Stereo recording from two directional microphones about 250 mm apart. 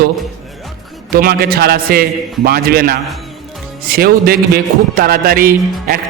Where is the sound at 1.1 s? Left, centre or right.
Right.